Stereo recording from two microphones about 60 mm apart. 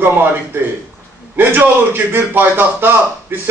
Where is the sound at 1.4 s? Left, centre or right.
Right.